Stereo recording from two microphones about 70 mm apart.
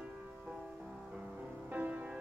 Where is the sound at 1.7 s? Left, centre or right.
Right.